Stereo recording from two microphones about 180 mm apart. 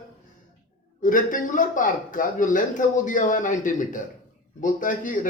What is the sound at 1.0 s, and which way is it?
Speech, 50° left (ahead or behind).